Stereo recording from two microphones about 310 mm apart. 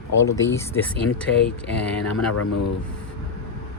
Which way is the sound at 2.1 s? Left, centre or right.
Left.